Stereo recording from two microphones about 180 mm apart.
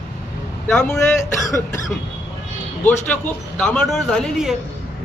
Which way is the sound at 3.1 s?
10° left (ahead or behind).